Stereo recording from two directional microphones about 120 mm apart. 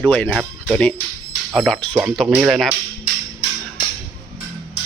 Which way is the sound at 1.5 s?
5° left (ahead or behind).